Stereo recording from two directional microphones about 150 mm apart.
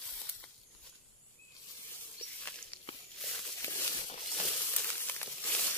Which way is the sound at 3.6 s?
20° left (ahead or behind).